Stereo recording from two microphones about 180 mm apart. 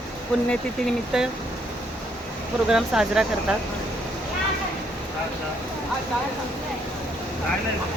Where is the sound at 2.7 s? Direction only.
5° right (ahead or behind).